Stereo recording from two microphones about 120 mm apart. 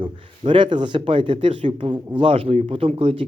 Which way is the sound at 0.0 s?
45° right (ahead or behind).